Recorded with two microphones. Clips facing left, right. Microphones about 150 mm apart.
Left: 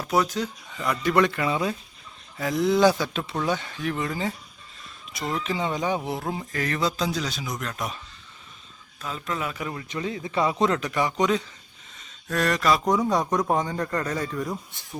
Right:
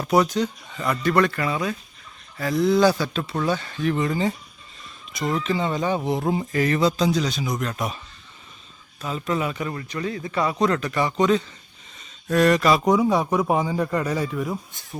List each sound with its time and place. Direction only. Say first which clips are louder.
0.0 s a man's voice: right 4 dB; centre (ahead or behind)
1.0 s a man's voice: right 1 dB; 15° left (ahead or behind)
5.4 s a man's voice: right 1 dB; 10° left (ahead or behind)
6.5 s a man's voice: right 5 dB; 5° right (ahead or behind)
9.0 s a man's voice: right 5 dB; 5° right (ahead or behind)
9.9 s a man's voice: left 1 dB; 15° left (ahead or behind)
12.3 s speech: right 5 dB; 5° right (ahead or behind)